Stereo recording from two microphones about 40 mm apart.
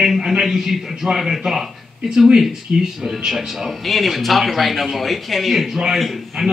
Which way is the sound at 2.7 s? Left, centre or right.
Right.